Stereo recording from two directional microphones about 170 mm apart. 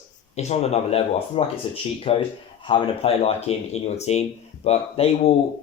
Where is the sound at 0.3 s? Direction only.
40° left (ahead or behind).